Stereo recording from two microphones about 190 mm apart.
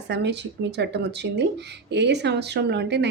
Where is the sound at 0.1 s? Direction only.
65° right (ahead or behind).